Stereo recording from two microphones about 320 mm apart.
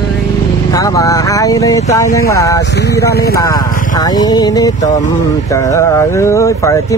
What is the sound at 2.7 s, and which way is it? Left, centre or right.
Speech, left.